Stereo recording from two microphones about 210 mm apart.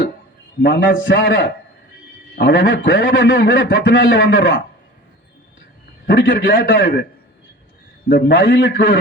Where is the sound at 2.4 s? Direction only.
60° left (ahead or behind).